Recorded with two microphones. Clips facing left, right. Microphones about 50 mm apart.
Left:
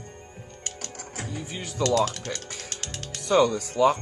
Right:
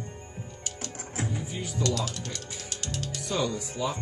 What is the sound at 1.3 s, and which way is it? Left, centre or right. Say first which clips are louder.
Music: even; left.